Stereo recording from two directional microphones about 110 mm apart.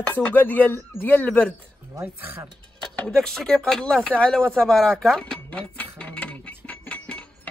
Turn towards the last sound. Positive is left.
turn(degrees=10)  # may be behind; listen again after turning